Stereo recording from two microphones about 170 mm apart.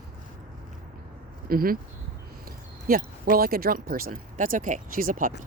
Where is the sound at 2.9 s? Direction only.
60° right (ahead or behind).